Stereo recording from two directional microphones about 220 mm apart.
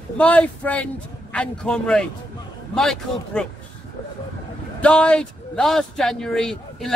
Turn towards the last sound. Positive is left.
turn(degrees=0)  # may be behind; listen again after turning